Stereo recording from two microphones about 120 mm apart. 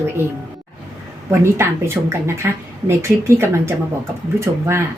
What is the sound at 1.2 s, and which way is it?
A woman's voice, 20° right (ahead or behind).